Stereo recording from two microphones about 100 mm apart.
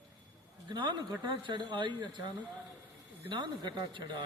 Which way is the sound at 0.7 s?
50° right (ahead or behind).